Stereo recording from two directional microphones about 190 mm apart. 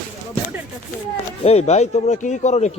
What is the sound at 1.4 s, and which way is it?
Speech, 35° left (ahead or behind).